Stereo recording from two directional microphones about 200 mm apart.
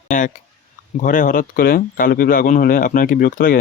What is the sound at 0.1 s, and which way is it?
Speech, 40° left (ahead or behind).